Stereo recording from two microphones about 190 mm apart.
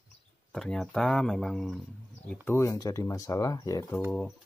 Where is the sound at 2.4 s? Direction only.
15° left (ahead or behind).